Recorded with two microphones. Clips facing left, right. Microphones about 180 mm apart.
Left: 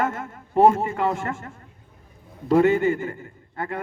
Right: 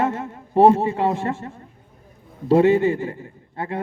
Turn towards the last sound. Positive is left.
turn(degrees=-25)  # may be behind; listen again after turning